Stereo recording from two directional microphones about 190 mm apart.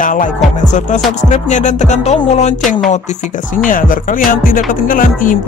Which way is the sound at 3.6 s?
45° left (ahead or behind).